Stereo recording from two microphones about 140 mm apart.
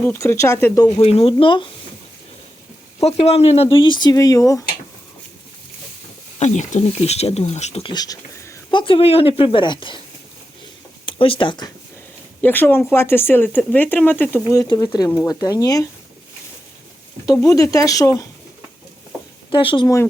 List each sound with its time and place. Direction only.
0.0 s speech: 15° left (ahead or behind)
0.9 s speech: 45° left (ahead or behind)
3.0 s speech: 50° left (ahead or behind); by 4.6 s 25° left (ahead or behind)
6.4 s speech: 55° left (ahead or behind)
7.9 s speech: 25° left (ahead or behind)
8.7 s speech: 35° left (ahead or behind)
11.0 s speech: 40° left (ahead or behind)
12.4 s speech: 15° left (ahead or behind)
14.7 s speech: 30° left (ahead or behind)
17.4 s speech: 25° left (ahead or behind)
19.5 s speech: 35° left (ahead or behind)